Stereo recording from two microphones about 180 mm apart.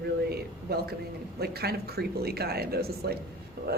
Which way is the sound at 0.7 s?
60° right (ahead or behind).